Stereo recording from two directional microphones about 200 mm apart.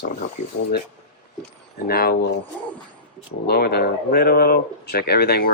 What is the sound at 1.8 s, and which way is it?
Speech, 50° left (ahead or behind).